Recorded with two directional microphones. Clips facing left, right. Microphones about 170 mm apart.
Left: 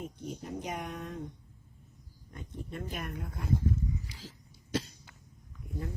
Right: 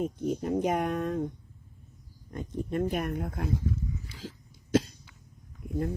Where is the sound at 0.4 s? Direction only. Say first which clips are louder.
Right 11 dB; 60° right (ahead or behind).